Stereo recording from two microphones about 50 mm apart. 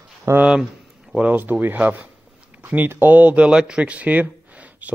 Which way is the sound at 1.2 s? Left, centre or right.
Right.